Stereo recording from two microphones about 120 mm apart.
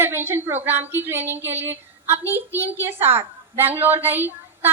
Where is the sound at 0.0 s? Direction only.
20° right (ahead or behind).